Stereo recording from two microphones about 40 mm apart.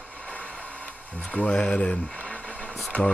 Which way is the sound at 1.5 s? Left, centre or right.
Left.